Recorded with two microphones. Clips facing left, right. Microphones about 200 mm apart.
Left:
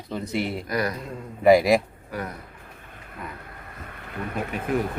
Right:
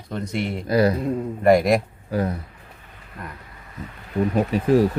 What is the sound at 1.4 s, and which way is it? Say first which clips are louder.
Speech: even; centre (ahead or behind).